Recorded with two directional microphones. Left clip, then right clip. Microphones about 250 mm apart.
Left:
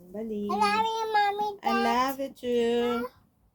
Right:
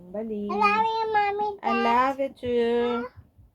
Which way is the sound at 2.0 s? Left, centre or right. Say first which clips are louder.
Right 5 dB; centre.